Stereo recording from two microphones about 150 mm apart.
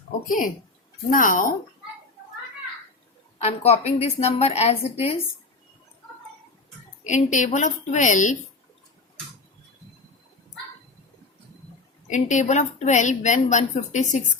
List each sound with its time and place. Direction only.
0.3 s a woman's voice: 65° left (ahead or behind)
3.4 s a woman's voice: 45° left (ahead or behind)
7.0 s a woman's voice: 55° left (ahead or behind)
12.0 s a woman's voice: 55° left (ahead or behind)